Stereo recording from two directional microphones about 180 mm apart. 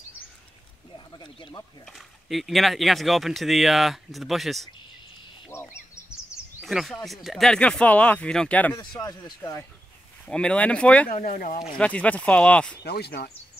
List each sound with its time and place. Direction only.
0.9 s speech: 25° left (ahead or behind)
1.9 s speech: centre (ahead or behind)
5.5 s a sound: 15° left (ahead or behind)
6.6 s speech: centre (ahead or behind)
8.7 s speech: 20° left (ahead or behind)
10.2 s speech: 5° left (ahead or behind)
11.1 s speech: 45° left (ahead or behind)
11.8 s speech: 5° left (ahead or behind)
12.8 s speech: 60° left (ahead or behind)